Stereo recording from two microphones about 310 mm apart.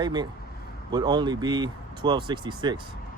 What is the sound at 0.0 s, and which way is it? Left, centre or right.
Speech, centre.